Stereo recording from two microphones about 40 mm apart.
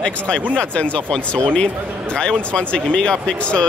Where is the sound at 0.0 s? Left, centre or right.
Left.